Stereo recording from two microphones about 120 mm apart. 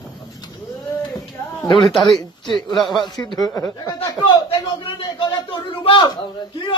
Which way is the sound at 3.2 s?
35° left (ahead or behind).